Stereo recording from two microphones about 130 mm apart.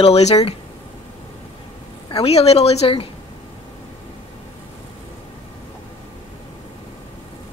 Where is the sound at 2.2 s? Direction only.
50° left (ahead or behind).